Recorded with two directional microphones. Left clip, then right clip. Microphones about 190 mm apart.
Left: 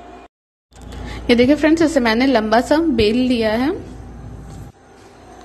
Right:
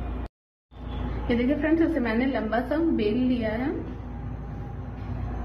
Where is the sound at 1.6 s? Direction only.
60° left (ahead or behind).